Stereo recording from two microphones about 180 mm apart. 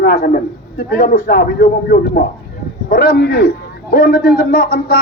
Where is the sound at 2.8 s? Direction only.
60° left (ahead or behind).